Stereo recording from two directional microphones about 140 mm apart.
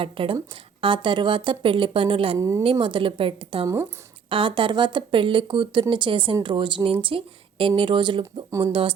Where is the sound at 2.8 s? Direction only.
35° right (ahead or behind).